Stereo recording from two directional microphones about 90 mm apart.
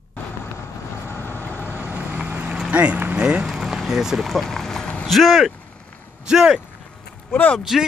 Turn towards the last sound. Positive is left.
turn(degrees=-5)  # may be behind; listen again after turning